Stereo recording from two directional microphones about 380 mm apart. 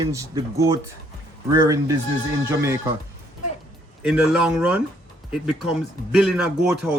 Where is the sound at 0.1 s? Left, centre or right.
Centre.